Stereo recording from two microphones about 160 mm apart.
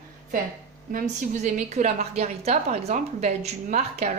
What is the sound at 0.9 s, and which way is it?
A woman's voice, 60° right (ahead or behind).